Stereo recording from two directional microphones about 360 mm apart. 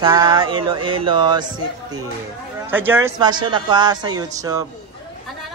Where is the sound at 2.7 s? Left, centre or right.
Centre.